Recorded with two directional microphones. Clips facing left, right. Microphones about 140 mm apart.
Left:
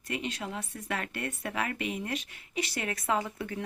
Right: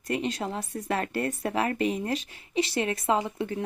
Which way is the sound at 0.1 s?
40° right (ahead or behind).